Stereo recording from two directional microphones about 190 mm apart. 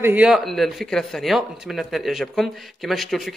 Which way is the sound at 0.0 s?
10° right (ahead or behind).